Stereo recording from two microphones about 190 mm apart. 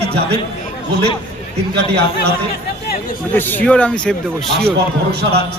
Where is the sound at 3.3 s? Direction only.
10° left (ahead or behind).